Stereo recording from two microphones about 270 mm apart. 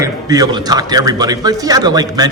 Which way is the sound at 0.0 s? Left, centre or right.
Centre.